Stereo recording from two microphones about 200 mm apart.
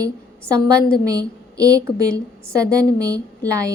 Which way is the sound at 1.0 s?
15° right (ahead or behind).